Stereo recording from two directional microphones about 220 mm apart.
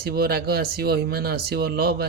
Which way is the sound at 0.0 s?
45° right (ahead or behind).